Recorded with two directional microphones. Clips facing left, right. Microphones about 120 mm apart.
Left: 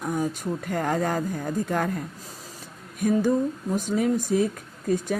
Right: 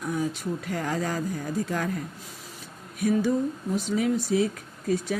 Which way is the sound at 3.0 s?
50° left (ahead or behind).